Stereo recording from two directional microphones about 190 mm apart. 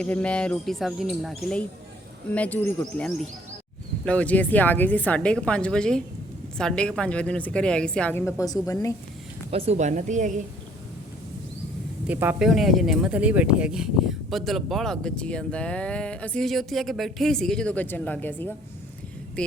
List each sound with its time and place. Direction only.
0.0 s a woman's voice: 5° left (ahead or behind)
4.0 s a woman's voice: 5° left (ahead or behind)
9.5 s a woman's voice: 30° right (ahead or behind)
12.0 s speech: 10° right (ahead or behind); by 18.5 s 10° left (ahead or behind)